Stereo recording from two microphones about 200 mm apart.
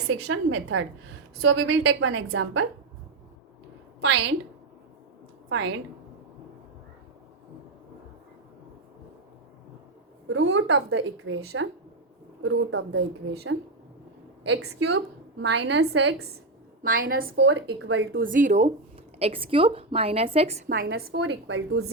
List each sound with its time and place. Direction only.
0.3 s speech: 80° right
1.4 s a woman's voice: 65° right (ahead or behind)
4.0 s a woman's voice: 65° right (ahead or behind)
5.5 s a woman's voice: 75° right (ahead or behind)
10.2 s a woman's voice: 70° right (ahead or behind)
16.8 s a woman's voice: 45° right (ahead or behind); by 18.3 s 65° right (ahead or behind)
18.3 s a woman's voice: 40° right (ahead or behind)
20.7 s a woman's voice: 45° right (ahead or behind)
21.2 s speech: 75° right (ahead or behind)